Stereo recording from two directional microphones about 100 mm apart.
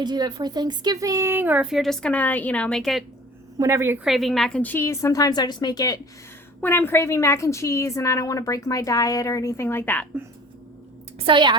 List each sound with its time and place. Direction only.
0.0 s speech: 45° right (ahead or behind); by 1.6 s 20° right (ahead or behind)
1.6 s a woman's voice: centre (ahead or behind)
3.6 s a woman's voice: 25° right (ahead or behind)
4.0 s a woman's voice: centre (ahead or behind); by 6.0 s 40° left (ahead or behind)
6.6 s a woman's voice: 20° left (ahead or behind)
11.3 s a woman's voice: 50° right (ahead or behind)